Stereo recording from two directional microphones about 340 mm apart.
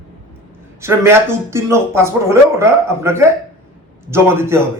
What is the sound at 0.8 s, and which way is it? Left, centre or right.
Speech, centre.